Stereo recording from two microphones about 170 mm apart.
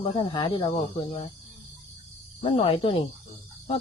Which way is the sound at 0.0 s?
30° left (ahead or behind).